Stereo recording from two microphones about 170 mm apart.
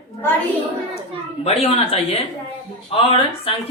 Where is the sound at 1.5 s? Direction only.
35° left (ahead or behind).